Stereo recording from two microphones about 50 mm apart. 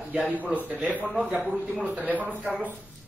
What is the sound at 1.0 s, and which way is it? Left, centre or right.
Speech, right.